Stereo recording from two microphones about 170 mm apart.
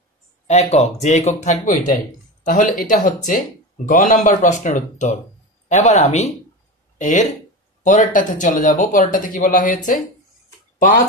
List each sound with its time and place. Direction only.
0.5 s speech: 40° left (ahead or behind)